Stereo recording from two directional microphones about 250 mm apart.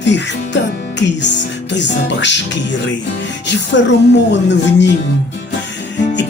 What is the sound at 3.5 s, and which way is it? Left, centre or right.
Music, left.